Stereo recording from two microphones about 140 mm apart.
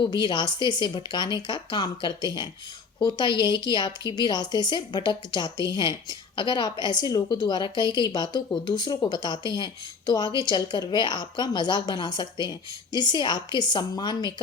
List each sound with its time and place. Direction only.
0.0 s speech: 30° left (ahead or behind)